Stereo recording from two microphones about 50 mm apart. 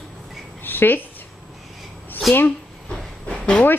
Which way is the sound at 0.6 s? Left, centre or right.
Left.